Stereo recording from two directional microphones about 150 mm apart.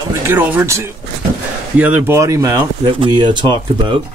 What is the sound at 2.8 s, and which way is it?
Speech, 30° right (ahead or behind).